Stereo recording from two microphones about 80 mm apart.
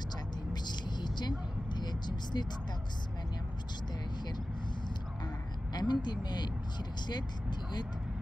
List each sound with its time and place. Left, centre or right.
0.5 s vehicle: left
5.7 s speech: left